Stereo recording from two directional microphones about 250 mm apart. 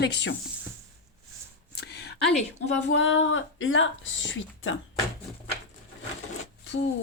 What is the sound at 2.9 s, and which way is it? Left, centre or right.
Speech, left.